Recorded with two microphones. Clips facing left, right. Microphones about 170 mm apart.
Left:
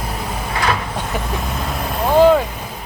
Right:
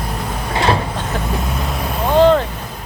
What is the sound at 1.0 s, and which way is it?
Speech, centre (ahead or behind).